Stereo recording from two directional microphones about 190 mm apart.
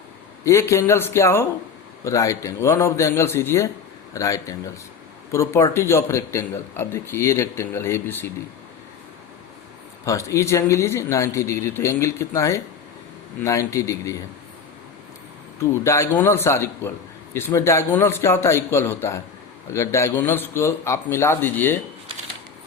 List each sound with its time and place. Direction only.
0.4 s a man's voice: 15° left (ahead or behind)
10.1 s a man's voice: 15° left (ahead or behind)
15.8 s a man's voice: 15° left (ahead or behind)